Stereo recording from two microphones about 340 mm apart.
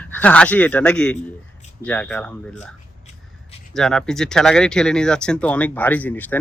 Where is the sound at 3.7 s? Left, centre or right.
Centre.